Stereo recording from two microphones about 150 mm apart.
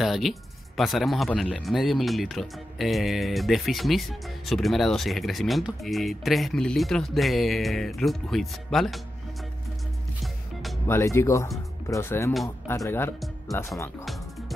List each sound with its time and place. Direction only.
0.0 s speech: centre (ahead or behind)
10.9 s speech: 15° left (ahead or behind)